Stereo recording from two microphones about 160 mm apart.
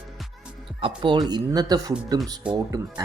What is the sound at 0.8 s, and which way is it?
Speech, 30° right (ahead or behind).